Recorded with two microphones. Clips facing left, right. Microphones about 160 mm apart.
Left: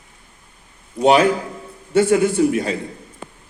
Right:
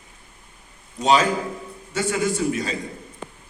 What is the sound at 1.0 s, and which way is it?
A man's voice, 60° left (ahead or behind).